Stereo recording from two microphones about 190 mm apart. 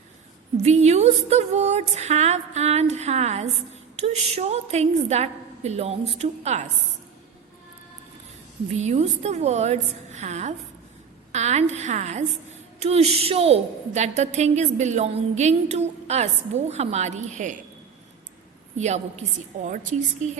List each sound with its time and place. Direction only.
0.5 s a woman's voice: 35° right (ahead or behind)
8.7 s a woman's voice: 35° right (ahead or behind)
18.8 s a woman's voice: 35° right (ahead or behind)